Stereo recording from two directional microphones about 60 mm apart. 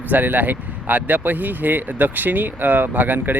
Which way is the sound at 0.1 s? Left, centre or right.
Right.